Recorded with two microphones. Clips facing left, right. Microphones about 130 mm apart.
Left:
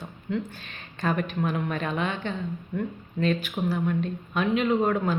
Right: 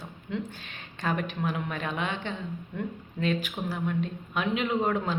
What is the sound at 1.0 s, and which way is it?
A woman's voice, 15° right (ahead or behind).